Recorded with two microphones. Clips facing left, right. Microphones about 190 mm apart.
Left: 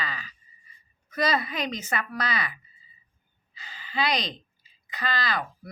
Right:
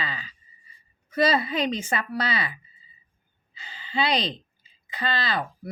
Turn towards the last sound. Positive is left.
turn(degrees=-25)  # may be behind; listen again after turning